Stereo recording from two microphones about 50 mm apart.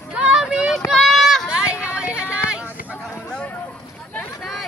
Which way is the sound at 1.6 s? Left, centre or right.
Right.